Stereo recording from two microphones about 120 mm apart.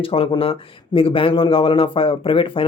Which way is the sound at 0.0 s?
50° left (ahead or behind).